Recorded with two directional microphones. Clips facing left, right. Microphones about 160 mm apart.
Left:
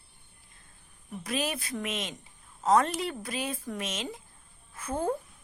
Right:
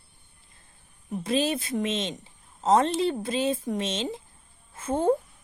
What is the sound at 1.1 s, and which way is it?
A woman's voice, 25° right (ahead or behind).